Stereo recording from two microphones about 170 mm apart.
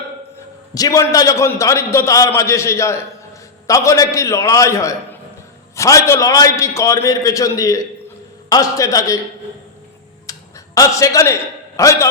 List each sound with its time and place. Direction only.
0.7 s a man's voice: 20° left (ahead or behind)
10.3 s tick-tock: 20° left (ahead or behind)
10.8 s a man's voice: 20° left (ahead or behind)